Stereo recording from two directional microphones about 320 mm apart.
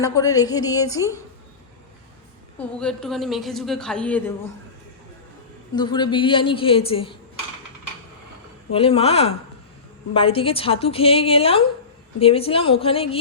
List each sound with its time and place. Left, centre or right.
0.0 s a woman's voice: centre
2.6 s a woman's voice: centre
5.7 s a woman's voice: centre
8.7 s a woman's voice: centre